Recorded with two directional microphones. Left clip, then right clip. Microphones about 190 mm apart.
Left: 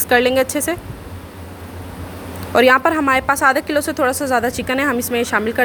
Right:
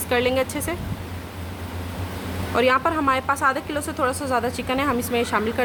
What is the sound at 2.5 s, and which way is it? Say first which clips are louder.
A woman's voice: left 7 dB; 25° left (ahead or behind).